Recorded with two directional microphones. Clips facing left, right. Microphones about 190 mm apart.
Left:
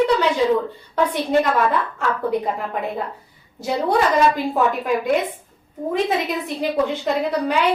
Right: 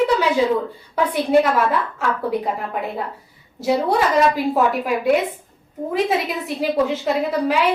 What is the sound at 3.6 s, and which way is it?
A woman's voice, centre (ahead or behind).